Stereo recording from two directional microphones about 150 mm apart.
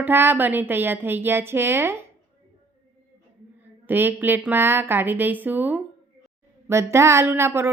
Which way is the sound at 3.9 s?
15° right (ahead or behind).